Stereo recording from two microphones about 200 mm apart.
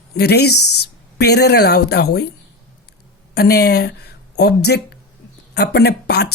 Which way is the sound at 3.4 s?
50° left (ahead or behind).